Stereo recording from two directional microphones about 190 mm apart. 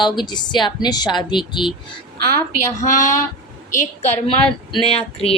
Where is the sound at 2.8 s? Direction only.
40° left (ahead or behind).